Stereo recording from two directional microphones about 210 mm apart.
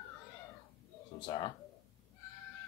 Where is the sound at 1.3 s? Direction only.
25° left (ahead or behind).